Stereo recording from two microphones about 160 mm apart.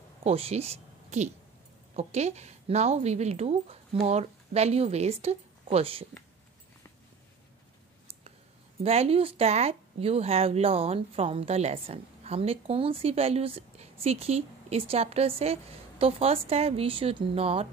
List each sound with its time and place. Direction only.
0.2 s a woman's voice: 40° right (ahead or behind)
8.8 s speech: 40° right (ahead or behind)